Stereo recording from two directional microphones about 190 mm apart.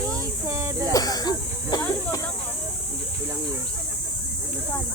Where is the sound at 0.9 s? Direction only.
20° left (ahead or behind).